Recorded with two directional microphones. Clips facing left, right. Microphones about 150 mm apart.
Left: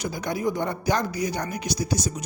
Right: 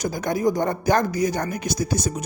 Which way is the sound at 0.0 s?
45° right (ahead or behind).